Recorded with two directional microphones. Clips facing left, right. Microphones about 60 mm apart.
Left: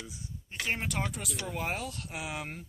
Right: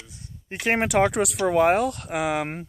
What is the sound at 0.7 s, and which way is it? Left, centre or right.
Speech, right.